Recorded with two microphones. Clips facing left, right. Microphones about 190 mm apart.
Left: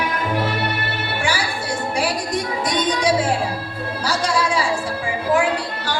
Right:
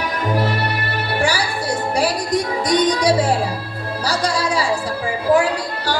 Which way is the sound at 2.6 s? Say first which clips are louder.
Right 3 dB; 40° right (ahead or behind).